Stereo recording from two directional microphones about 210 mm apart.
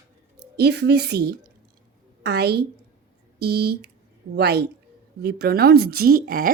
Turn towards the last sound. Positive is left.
turn(degrees=-45)  # may be behind; listen again after turning